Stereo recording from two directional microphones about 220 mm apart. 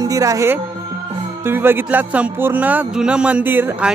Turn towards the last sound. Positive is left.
turn(degrees=-10)  # may be behind; listen again after turning